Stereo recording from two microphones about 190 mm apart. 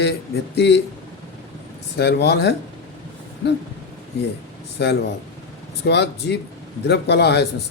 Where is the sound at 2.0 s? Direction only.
65° left (ahead or behind).